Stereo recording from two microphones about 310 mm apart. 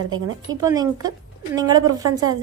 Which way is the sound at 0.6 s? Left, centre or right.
Centre.